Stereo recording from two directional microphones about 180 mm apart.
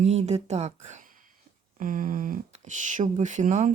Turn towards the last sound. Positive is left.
turn(degrees=-40)  # may be behind; listen again after turning